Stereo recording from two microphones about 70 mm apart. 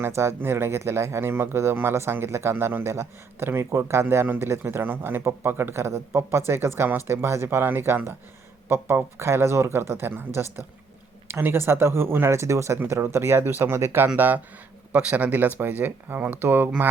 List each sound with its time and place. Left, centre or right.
0.0 s speech: right
9.1 s speech: right
13.7 s speech: right
14.2 s speech: right